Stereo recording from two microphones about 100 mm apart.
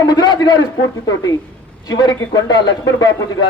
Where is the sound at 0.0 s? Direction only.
40° left (ahead or behind).